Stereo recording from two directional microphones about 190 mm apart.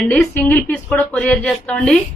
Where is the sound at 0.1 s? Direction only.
10° left (ahead or behind).